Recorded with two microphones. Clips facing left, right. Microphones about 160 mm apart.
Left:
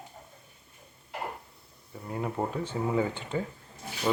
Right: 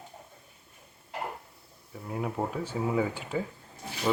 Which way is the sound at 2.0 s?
Centre (ahead or behind).